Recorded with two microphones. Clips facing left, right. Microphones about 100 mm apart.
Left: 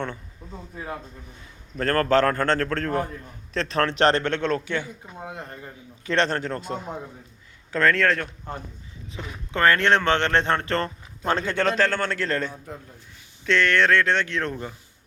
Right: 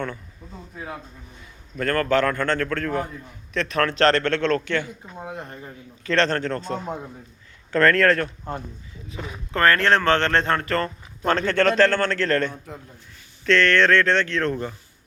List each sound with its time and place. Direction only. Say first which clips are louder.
1.8 s a man's voice: left 1 dB; 35° left (ahead or behind)
3.9 s a man's voice: right 2 dB; 15° left (ahead or behind)
7.7 s speech: right 3 dB; centre (ahead or behind)
9.5 s speech: right 1 dB; 20° left (ahead or behind)
11.3 s a man's voice: right 3 dB; 15° left (ahead or behind)